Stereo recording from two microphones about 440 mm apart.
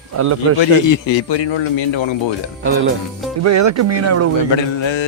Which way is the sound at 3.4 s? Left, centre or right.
Right.